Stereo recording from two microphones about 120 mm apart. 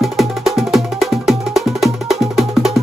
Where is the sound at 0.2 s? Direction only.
Centre (ahead or behind).